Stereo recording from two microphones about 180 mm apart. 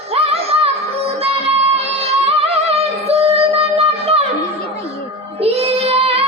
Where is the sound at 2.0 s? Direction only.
35° right (ahead or behind).